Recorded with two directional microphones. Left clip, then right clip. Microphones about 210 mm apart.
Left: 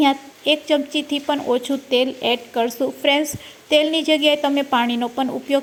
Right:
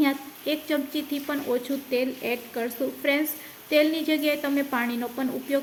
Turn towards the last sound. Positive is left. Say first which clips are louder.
# left 7 dB
turn(degrees=25)  # may be behind; listen again after turning